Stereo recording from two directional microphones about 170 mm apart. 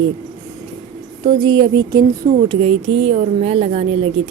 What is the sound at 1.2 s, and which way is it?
Speech, 30° right (ahead or behind).